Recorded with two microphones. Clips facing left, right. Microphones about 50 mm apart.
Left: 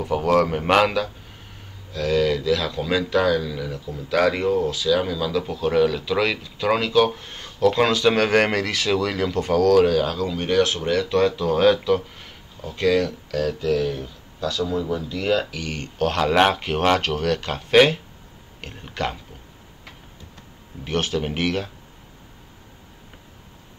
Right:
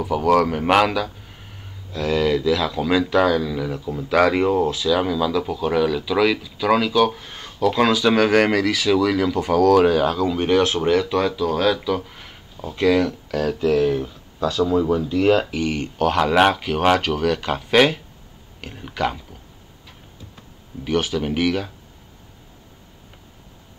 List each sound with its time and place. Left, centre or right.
0.0 s speech: centre
1.9 s speech: right
4.8 s speech: centre
7.2 s speech: centre
9.4 s speech: centre
11.1 s speech: centre
11.5 s speech: centre
12.1 s speech: centre
16.3 s speech: centre
16.8 s speech: centre
21.1 s speech: centre